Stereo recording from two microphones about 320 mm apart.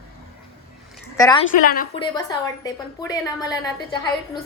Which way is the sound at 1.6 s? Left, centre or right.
Left.